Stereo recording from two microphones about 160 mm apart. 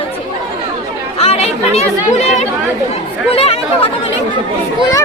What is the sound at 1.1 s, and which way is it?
Speech, 40° left (ahead or behind).